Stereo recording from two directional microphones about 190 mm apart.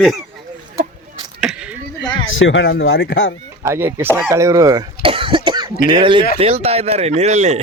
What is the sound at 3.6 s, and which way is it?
Speech, 10° right (ahead or behind).